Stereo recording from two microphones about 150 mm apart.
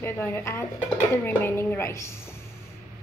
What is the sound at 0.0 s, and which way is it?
A woman's voice, 15° left (ahead or behind).